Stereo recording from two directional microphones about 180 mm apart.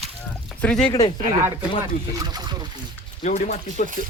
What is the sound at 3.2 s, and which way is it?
Speech, 40° left (ahead or behind).